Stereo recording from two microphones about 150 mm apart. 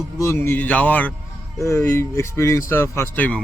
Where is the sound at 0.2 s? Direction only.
20° left (ahead or behind).